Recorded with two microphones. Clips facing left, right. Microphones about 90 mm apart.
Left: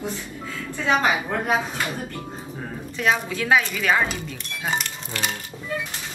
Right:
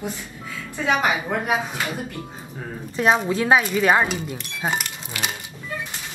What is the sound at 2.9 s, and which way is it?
Speech, 35° right (ahead or behind).